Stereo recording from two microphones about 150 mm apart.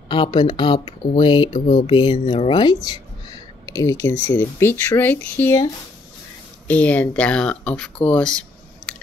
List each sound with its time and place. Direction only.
0.1 s speech: 30° left (ahead or behind)
3.7 s speech: 20° left (ahead or behind)
6.7 s speech: 10° left (ahead or behind)
8.1 s computer keyboard: 5° left (ahead or behind)